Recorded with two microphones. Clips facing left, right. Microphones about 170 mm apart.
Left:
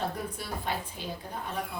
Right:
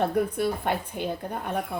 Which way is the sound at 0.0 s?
60° right (ahead or behind).